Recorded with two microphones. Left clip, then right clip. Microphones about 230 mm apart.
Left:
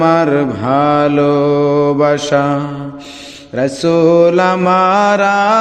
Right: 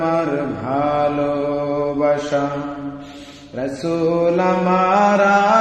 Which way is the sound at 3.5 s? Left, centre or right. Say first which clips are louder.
Left 9 dB; left.